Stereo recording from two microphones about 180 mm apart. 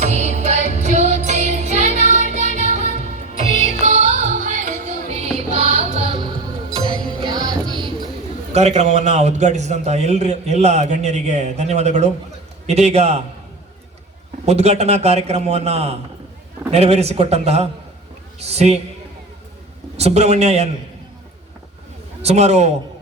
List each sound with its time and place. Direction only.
0.0 s music: 40° right (ahead or behind); by 7.7 s 20° right (ahead or behind)
8.5 s a man's voice: 40° right (ahead or behind)
14.4 s a man's voice: 35° right (ahead or behind)
20.0 s a man's voice: 35° right (ahead or behind)
22.2 s a man's voice: 35° right (ahead or behind)